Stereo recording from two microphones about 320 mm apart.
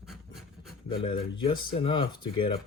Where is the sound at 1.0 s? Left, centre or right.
Centre.